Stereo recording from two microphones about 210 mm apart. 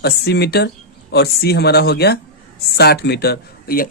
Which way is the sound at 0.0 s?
50° left (ahead or behind).